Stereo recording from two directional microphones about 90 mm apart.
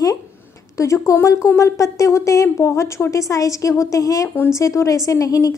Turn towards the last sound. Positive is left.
turn(degrees=40)  # may be behind; listen again after turning